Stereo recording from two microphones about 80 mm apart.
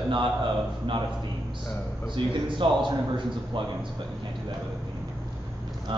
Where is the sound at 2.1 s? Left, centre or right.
Right.